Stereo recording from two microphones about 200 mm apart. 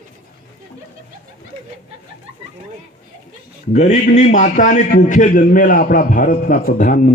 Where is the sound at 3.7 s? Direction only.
35° left (ahead or behind).